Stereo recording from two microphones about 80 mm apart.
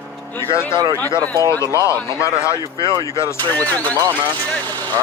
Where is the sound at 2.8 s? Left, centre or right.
Right.